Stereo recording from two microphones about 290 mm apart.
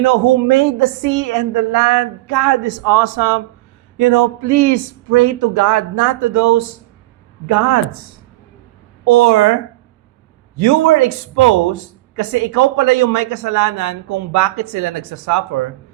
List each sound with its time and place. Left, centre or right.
0.0 s a woman's voice: right
9.0 s speech: right
10.6 s speech: right